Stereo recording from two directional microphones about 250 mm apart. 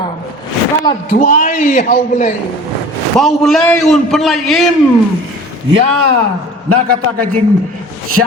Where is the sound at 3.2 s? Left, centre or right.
Centre.